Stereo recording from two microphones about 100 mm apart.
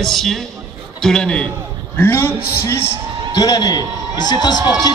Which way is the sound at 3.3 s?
40° left (ahead or behind).